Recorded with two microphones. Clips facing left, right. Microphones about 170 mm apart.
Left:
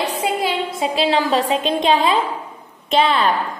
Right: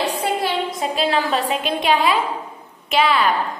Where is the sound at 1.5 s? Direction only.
20° left (ahead or behind).